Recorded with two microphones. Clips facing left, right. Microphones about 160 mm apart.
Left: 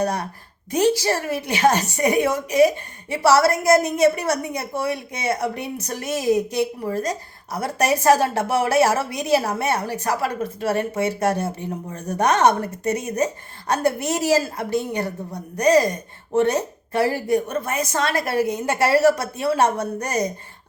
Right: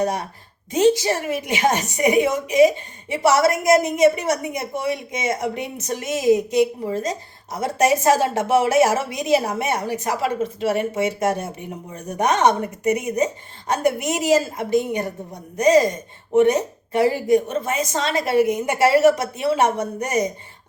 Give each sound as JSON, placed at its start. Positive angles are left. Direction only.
{"t": 0.0, "sound": "a woman's voice", "side_deg": -20}